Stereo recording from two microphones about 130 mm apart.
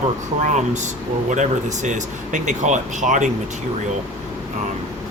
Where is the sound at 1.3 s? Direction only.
70° right (ahead or behind).